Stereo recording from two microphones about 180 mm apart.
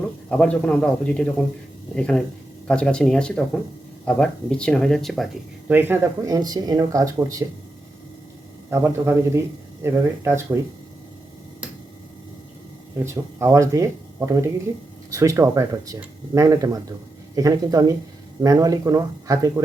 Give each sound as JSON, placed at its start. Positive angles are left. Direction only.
{"t": 0.3, "sound": "speech", "side_deg": 5}
{"t": 5.7, "sound": "speech", "side_deg": -15}
{"t": 8.7, "sound": "speech", "side_deg": -15}
{"t": 13.1, "sound": "speech", "side_deg": -15}